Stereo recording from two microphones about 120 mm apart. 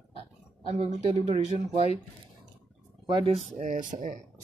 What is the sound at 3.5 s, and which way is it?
Speech, 90° right.